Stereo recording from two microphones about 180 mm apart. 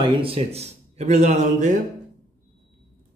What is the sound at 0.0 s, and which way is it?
A man's voice, 30° right (ahead or behind).